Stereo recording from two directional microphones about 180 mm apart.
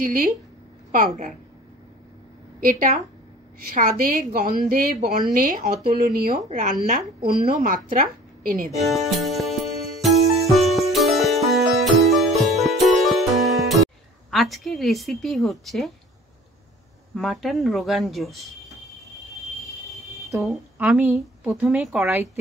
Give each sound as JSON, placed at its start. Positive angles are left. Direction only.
{"t": 0.0, "sound": "a woman's voice", "side_deg": -55}
{"t": 2.6, "sound": "a woman's voice", "side_deg": -50}
{"t": 8.7, "sound": "music", "side_deg": 0}
{"t": 14.3, "sound": "a woman's voice", "side_deg": 0}
{"t": 17.1, "sound": "a woman's voice", "side_deg": 0}
{"t": 20.3, "sound": "a woman's voice", "side_deg": -5}